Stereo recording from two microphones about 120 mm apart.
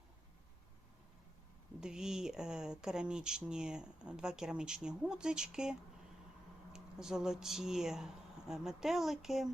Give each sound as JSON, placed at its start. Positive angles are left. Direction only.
{"t": 1.8, "sound": "speech", "side_deg": -5}
{"t": 6.7, "sound": "speech", "side_deg": -5}